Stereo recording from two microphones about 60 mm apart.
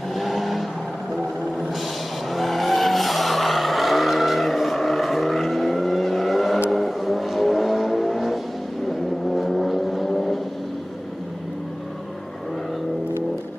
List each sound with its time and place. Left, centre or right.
0.1 s vehicle: centre
1.6 s a sound: centre
2.3 s vehicle: centre